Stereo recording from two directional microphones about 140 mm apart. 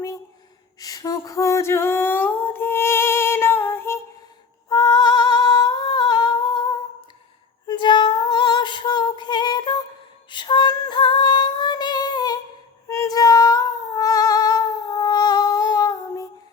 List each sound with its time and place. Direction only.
0.8 s a sound: 25° left (ahead or behind)
4.7 s humming: 30° left (ahead or behind)
7.7 s female singing: 35° left (ahead or behind)